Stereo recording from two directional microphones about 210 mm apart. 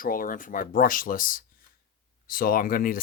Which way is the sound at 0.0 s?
40° left (ahead or behind).